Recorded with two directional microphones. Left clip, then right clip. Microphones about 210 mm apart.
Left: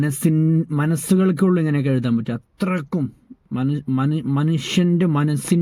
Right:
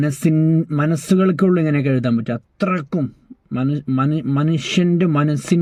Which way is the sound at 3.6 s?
10° left (ahead or behind).